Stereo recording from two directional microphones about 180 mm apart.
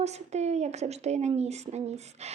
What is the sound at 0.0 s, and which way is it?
A woman's voice, 40° right (ahead or behind).